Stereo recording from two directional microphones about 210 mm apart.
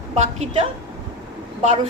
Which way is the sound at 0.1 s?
30° right (ahead or behind).